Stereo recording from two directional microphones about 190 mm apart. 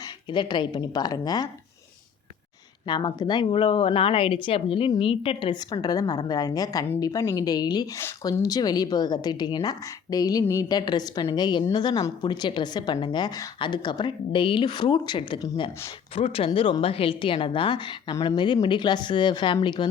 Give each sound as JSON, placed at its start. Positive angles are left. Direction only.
{"t": 0.3, "sound": "speech", "side_deg": 25}
{"t": 2.8, "sound": "speech", "side_deg": 25}